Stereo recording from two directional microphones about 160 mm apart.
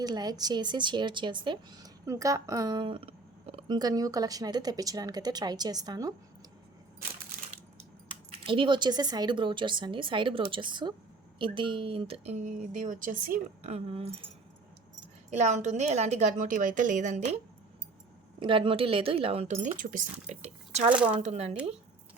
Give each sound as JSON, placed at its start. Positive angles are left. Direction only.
{"t": 0.0, "sound": "speech", "side_deg": -25}
{"t": 3.8, "sound": "a woman's voice", "side_deg": -25}
{"t": 8.3, "sound": "a woman's voice", "side_deg": -30}
{"t": 13.7, "sound": "speech", "side_deg": -40}
{"t": 15.3, "sound": "speech", "side_deg": -45}
{"t": 18.3, "sound": "speech", "side_deg": -30}